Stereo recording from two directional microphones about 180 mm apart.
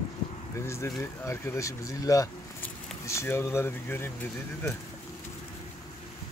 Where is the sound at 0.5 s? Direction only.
15° left (ahead or behind).